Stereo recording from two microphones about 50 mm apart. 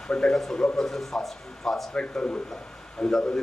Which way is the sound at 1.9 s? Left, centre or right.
Left.